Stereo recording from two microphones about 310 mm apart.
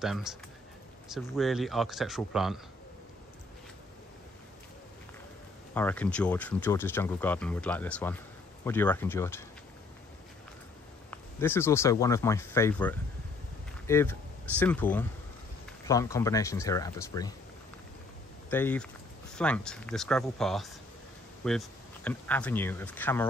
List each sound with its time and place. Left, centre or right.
0.0 s speech: centre
5.8 s speech: centre
11.1 s speech: centre
18.5 s speech: centre